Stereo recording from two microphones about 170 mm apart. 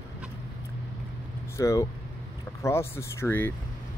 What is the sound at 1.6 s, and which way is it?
Speech, 20° left (ahead or behind).